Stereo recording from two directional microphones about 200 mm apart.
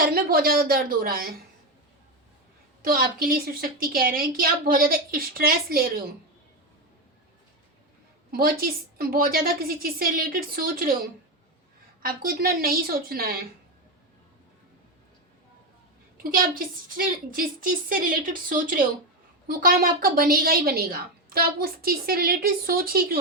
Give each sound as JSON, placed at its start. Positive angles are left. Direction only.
{"t": 0.0, "sound": "a woman's voice", "side_deg": -45}
{"t": 2.8, "sound": "a woman's voice", "side_deg": -45}
{"t": 8.3, "sound": "a woman's voice", "side_deg": -45}
{"t": 12.0, "sound": "a woman's voice", "side_deg": -45}
{"t": 16.1, "sound": "a woman's voice", "side_deg": -45}